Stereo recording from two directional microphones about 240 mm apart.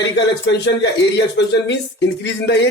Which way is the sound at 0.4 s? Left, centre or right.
Left.